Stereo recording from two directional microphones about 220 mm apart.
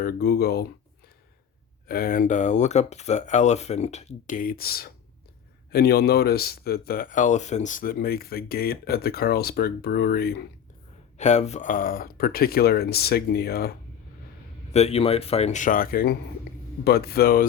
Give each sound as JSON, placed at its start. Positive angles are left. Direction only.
{"t": 0.0, "sound": "speech", "side_deg": 45}
{"t": 1.9, "sound": "speech", "side_deg": 40}
{"t": 11.2, "sound": "speech", "side_deg": 30}
{"t": 14.7, "sound": "speech", "side_deg": 30}